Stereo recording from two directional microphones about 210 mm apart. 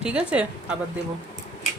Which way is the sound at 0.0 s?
5° right (ahead or behind).